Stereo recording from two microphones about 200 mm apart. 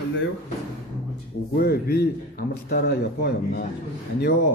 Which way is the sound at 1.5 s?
50° left (ahead or behind).